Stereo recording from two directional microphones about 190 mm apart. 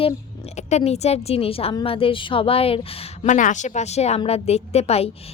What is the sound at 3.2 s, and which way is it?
A woman's voice, 40° left (ahead or behind).